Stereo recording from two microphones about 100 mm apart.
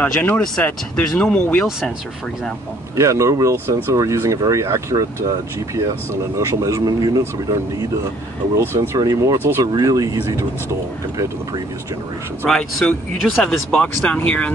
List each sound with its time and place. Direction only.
0.0 s speech: 15° left (ahead or behind)
3.0 s speech: 30° right (ahead or behind)
6.3 s speech: 35° right (ahead or behind)
8.9 s speech: 40° right (ahead or behind)
9.4 s speech: 25° right (ahead or behind)
9.7 s speech: 40° right (ahead or behind)
12.4 s speech: 5° left (ahead or behind)